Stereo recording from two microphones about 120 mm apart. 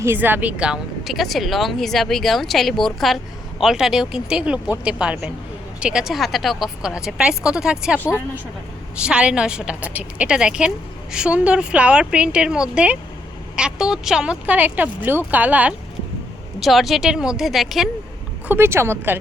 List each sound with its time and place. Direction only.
0.0 s speech: 20° right (ahead or behind)
7.9 s speech: 15° left (ahead or behind)
9.0 s speech: 10° right (ahead or behind)
16.6 s speech: centre (ahead or behind)
18.4 s speech: 20° right (ahead or behind)